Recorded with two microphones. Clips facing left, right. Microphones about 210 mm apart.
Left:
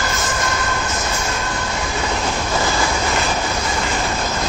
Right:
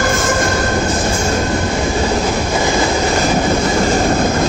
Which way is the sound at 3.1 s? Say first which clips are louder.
Right 7 dB; 40° right (ahead or behind).